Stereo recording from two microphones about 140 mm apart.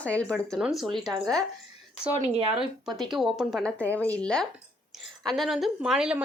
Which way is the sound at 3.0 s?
Centre (ahead or behind).